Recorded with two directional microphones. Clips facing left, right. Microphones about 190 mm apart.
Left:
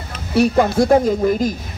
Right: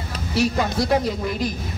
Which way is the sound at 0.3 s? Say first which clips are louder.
Left 7 dB; 55° left (ahead or behind).